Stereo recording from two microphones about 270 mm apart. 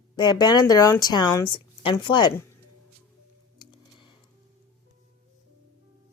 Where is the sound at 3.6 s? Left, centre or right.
Centre.